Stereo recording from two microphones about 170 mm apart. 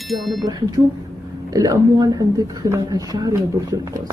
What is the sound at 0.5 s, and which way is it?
Speech, 20° right (ahead or behind).